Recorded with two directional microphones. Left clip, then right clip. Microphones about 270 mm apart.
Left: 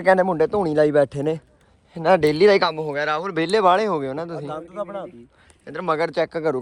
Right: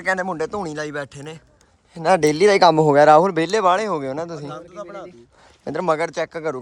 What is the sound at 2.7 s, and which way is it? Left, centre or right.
Speech, right.